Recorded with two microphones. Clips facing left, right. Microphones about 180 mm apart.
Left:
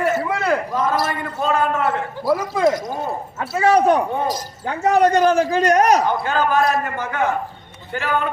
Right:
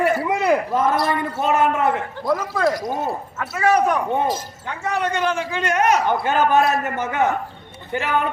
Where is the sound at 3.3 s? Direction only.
30° left (ahead or behind).